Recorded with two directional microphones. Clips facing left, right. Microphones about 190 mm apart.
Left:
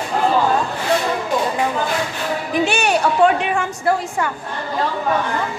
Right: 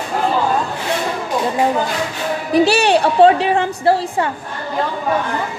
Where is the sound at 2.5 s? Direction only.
35° right (ahead or behind).